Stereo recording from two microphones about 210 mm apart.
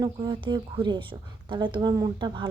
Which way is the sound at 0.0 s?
25° right (ahead or behind).